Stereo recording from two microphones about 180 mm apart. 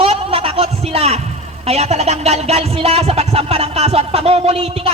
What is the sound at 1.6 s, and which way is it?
A woman's voice, 35° right (ahead or behind).